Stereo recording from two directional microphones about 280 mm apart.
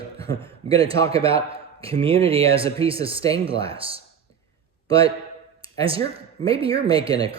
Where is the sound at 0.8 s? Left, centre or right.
Centre.